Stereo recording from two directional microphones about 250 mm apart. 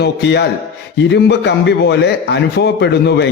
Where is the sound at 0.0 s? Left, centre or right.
Left.